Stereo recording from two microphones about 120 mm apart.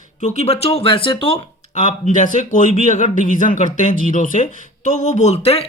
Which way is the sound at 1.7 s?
85° left.